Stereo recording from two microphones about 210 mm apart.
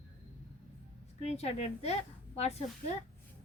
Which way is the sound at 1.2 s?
30° left (ahead or behind).